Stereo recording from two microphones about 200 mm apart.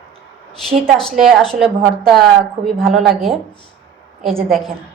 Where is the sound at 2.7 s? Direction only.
Centre (ahead or behind).